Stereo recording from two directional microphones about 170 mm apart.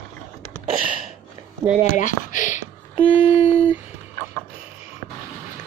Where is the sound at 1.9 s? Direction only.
50° left (ahead or behind).